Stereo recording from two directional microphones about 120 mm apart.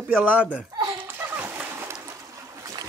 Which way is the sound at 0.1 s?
15° right (ahead or behind).